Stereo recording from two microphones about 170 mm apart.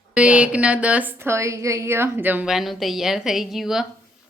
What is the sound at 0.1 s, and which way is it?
A woman's voice, 5° right (ahead or behind).